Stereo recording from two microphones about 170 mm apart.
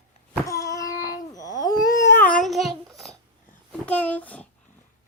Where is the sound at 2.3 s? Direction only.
Centre (ahead or behind).